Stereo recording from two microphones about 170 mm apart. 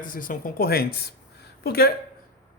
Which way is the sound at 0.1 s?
55° left (ahead or behind).